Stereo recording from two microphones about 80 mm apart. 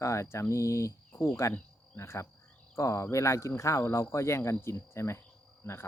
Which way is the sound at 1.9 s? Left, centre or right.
Left.